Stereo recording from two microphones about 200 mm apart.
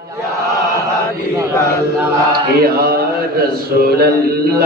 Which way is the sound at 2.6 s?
50° right (ahead or behind).